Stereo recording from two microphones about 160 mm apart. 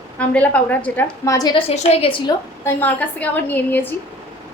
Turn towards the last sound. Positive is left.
turn(degrees=10)  # may be behind; listen again after turning